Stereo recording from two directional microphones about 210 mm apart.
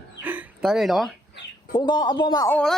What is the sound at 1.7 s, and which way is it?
Speech, 20° left (ahead or behind).